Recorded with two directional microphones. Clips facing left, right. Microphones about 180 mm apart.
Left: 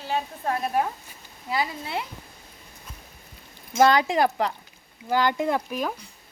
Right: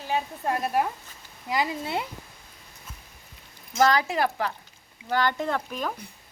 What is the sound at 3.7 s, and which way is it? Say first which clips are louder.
Speech: left 3 dB; 25° left (ahead or behind).